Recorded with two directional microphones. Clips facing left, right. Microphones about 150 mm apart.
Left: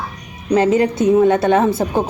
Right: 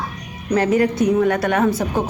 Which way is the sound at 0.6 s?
25° left (ahead or behind).